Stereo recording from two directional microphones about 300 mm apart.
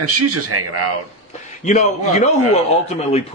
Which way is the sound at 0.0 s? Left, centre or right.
Right.